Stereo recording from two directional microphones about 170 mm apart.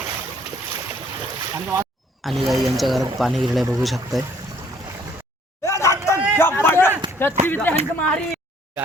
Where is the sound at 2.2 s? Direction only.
Centre (ahead or behind).